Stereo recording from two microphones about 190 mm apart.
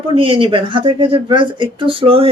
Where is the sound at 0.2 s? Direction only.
25° right (ahead or behind).